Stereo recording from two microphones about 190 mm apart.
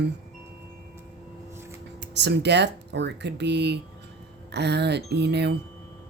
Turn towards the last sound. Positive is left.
turn(degrees=-60)  # may be behind; listen again after turning